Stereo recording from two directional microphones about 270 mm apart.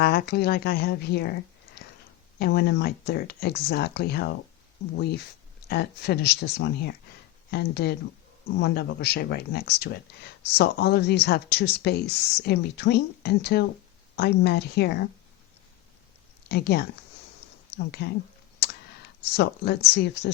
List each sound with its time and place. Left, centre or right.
0.0 s speech: left
2.4 s speech: left
5.6 s speech: left
16.5 s speech: left